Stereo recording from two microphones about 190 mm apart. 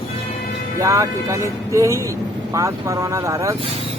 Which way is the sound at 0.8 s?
15° right (ahead or behind).